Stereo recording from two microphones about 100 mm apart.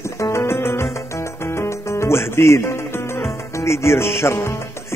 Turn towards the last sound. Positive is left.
turn(degrees=25)  # may be behind; listen again after turning